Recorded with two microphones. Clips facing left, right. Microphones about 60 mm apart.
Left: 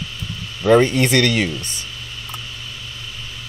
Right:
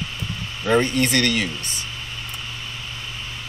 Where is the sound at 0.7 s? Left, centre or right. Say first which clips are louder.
Left 2 dB; left.